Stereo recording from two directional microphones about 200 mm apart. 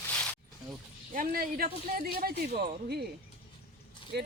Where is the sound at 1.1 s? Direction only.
45° right (ahead or behind).